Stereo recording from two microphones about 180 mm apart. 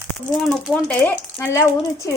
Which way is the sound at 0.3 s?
Centre (ahead or behind).